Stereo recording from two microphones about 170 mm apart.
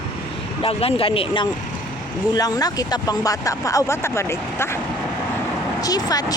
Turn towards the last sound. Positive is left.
turn(degrees=20)  # may be behind; listen again after turning